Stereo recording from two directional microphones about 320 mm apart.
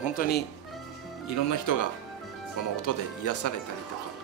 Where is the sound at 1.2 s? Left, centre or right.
Left.